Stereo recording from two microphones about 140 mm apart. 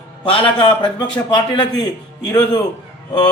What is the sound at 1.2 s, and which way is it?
Speech, 25° left (ahead or behind).